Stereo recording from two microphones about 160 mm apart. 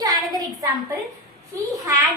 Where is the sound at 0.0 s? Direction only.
25° right (ahead or behind).